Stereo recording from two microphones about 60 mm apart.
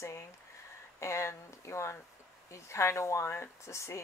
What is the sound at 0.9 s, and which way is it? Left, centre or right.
Speech, left.